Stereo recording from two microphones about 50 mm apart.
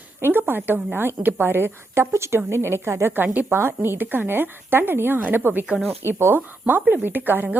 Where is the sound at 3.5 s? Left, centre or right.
Right.